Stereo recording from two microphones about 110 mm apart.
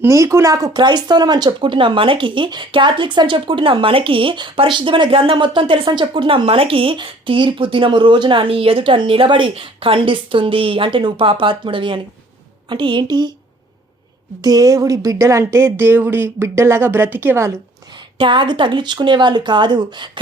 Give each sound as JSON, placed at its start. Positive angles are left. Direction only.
{"t": 0.0, "sound": "speech", "side_deg": -30}
{"t": 14.4, "sound": "speech", "side_deg": -35}
{"t": 18.2, "sound": "speech", "side_deg": -50}